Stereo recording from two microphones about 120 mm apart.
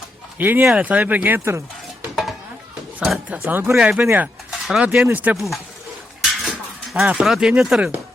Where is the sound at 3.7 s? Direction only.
5° right (ahead or behind).